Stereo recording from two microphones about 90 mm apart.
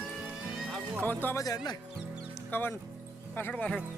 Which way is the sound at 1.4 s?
45° left (ahead or behind).